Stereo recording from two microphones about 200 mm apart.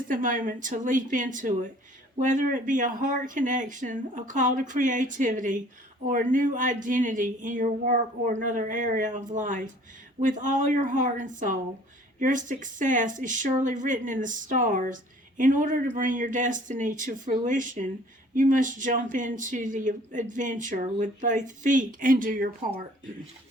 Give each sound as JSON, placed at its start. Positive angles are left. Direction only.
{"t": 0.1, "sound": "speech", "side_deg": -40}